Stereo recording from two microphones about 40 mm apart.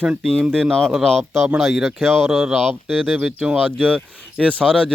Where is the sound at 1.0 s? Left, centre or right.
Centre.